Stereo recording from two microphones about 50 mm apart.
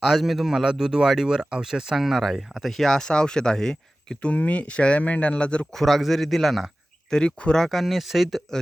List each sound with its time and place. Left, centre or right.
0.0 s a man's voice: centre
4.4 s speech: left
5.7 s a man's voice: centre
7.1 s speech: centre
7.6 s a man's voice: centre